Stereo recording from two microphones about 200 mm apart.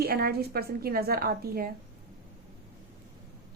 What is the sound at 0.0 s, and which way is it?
A woman's voice, 50° right (ahead or behind).